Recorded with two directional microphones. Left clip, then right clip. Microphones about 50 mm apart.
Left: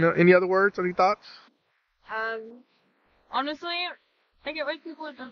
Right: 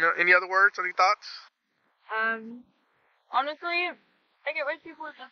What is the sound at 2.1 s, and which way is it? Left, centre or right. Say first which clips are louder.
Child singing: right 2 dB; left.